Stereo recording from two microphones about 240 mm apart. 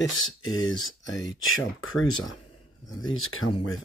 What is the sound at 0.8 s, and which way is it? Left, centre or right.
Speech, left.